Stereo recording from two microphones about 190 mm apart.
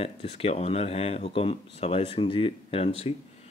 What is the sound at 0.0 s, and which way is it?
Speech, 35° left (ahead or behind).